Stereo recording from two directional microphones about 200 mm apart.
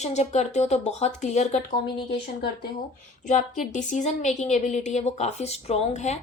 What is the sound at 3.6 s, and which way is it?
Speech, 40° left (ahead or behind).